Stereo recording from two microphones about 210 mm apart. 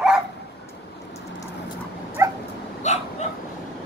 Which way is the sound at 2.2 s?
15° right (ahead or behind).